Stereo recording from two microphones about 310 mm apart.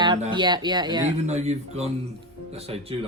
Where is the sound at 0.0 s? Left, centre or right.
Centre.